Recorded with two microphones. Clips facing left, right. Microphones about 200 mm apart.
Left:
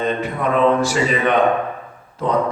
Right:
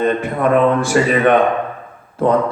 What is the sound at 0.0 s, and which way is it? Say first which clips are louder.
Speech: right 4 dB; 55° right (ahead or behind).